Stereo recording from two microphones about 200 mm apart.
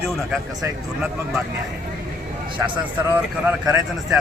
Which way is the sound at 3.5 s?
5° right (ahead or behind).